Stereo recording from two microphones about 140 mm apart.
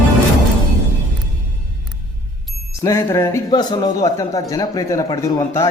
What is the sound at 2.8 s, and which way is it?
Speech, 20° left (ahead or behind).